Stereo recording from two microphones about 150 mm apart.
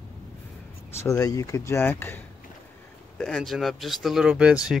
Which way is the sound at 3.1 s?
5° left (ahead or behind).